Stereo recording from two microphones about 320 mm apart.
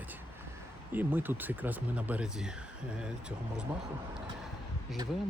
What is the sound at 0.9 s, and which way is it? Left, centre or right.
Speech, centre.